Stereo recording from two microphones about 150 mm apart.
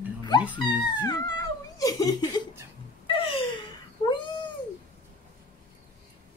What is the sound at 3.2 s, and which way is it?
Gasp, 35° left (ahead or behind).